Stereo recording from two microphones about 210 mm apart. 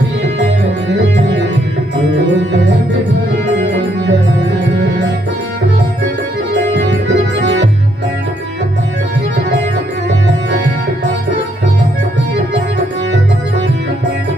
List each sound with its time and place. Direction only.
2.3 s music: 55° right (ahead or behind)
6.7 s music: 60° right (ahead or behind)